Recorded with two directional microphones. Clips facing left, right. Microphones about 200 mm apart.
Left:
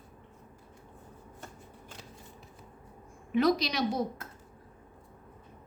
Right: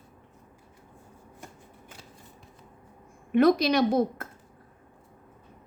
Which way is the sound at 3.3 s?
55° right (ahead or behind).